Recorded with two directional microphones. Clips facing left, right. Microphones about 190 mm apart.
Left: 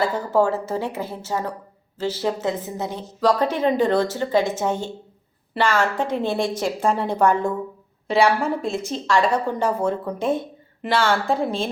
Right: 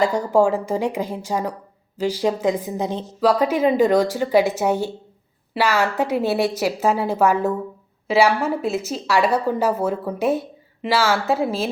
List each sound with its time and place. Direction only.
0.2 s a woman's voice: 10° right (ahead or behind)